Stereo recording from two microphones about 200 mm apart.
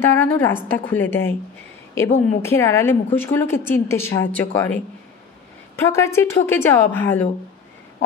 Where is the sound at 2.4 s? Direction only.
10° left (ahead or behind).